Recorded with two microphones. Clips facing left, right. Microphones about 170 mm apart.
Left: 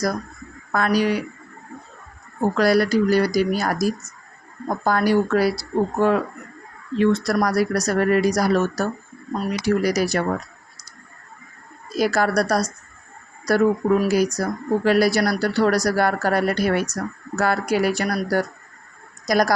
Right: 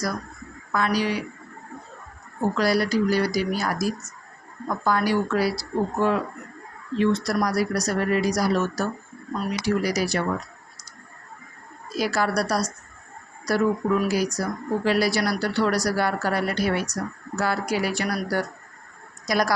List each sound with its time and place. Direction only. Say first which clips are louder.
0.7 s speech: left 4 dB; 50° left (ahead or behind)
2.6 s speech: left 5 dB; 55° left (ahead or behind)
11.9 s speech: left 4 dB; 50° left (ahead or behind)